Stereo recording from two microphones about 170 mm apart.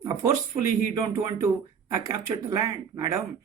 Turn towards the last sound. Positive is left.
turn(degrees=-20)  # may be behind; listen again after turning